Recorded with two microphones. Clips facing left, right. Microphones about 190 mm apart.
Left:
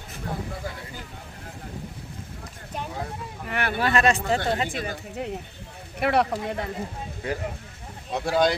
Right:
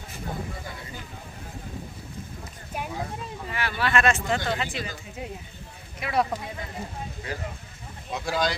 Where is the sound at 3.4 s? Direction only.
60° left (ahead or behind).